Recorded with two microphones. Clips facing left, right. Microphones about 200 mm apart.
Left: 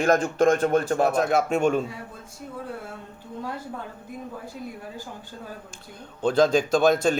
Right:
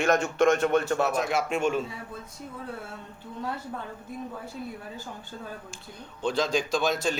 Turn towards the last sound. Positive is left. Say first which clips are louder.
# left 7 dB
turn(degrees=50)  # may be behind; listen again after turning